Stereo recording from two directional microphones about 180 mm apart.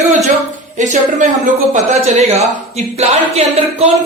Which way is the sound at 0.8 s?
45° right (ahead or behind).